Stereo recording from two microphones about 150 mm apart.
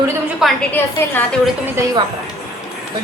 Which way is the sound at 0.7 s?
10° left (ahead or behind).